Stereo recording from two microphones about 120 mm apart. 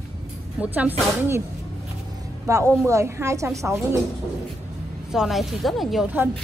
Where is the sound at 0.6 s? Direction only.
15° right (ahead or behind).